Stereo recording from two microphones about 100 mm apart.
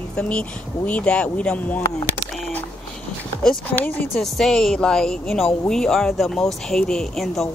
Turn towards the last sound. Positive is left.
turn(degrees=0)  # may be behind; listen again after turning